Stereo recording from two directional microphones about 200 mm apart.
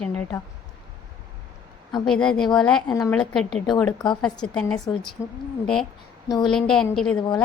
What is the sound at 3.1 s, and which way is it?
A woman's voice, 5° left (ahead or behind).